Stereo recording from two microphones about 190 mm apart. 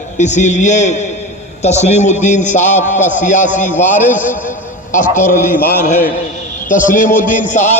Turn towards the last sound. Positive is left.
turn(degrees=40)  # may be behind; listen again after turning